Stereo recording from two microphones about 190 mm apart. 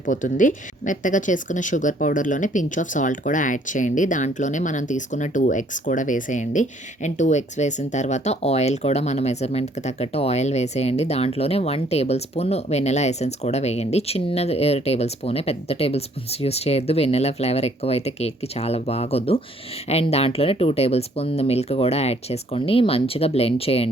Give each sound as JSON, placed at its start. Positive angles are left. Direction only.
{"t": 0.0, "sound": "speech", "side_deg": 40}